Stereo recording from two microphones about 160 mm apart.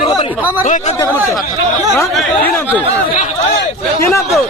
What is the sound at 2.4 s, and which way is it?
Speech, 10° left (ahead or behind).